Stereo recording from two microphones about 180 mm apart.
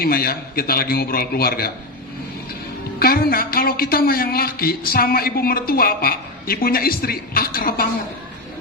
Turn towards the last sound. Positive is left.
turn(degrees=55)  # may be behind; listen again after turning